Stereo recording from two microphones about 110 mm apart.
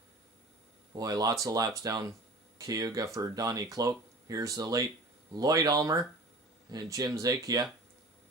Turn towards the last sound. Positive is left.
turn(degrees=-35)  # may be behind; listen again after turning